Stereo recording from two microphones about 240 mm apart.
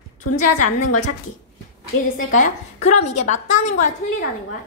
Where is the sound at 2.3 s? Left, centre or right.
Left.